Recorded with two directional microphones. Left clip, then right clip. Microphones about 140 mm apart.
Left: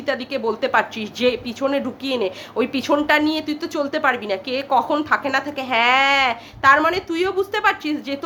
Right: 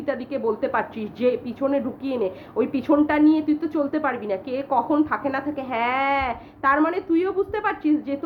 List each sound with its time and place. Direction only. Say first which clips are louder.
0.0 s speech: left 3 dB; 15° left (ahead or behind)